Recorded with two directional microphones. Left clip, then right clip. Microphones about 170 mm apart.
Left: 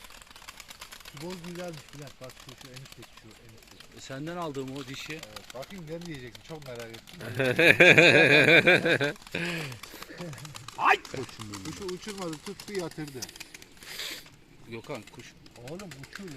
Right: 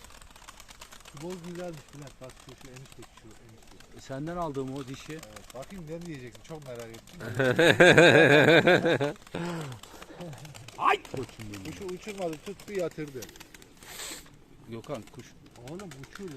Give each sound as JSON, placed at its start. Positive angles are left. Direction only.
{"t": 1.2, "sound": "speech", "side_deg": 10}
{"t": 4.0, "sound": "speech", "side_deg": -80}
{"t": 5.2, "sound": "speech", "side_deg": -20}
{"t": 6.1, "sound": "speech", "side_deg": 5}
{"t": 7.3, "sound": "speech", "side_deg": -20}
{"t": 10.8, "sound": "speech", "side_deg": -5}
{"t": 11.9, "sound": "speech", "side_deg": 50}
{"t": 13.9, "sound": "a sound", "side_deg": -10}
{"t": 14.7, "sound": "speech", "side_deg": -85}
{"t": 15.6, "sound": "speech", "side_deg": 15}